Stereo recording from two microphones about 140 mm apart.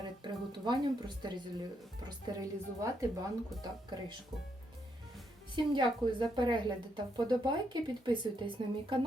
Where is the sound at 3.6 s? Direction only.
30° right (ahead or behind).